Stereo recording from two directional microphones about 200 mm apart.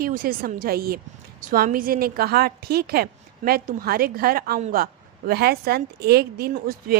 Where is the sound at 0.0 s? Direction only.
45° right (ahead or behind).